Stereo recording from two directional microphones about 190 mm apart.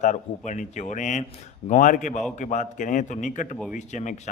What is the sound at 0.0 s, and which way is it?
A man's voice, 40° left (ahead or behind).